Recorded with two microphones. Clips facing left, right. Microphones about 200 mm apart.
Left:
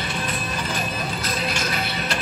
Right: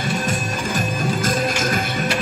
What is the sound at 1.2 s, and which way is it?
Music, 45° right (ahead or behind).